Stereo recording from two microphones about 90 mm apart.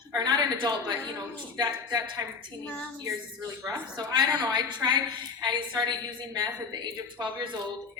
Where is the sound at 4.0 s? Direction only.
50° right (ahead or behind).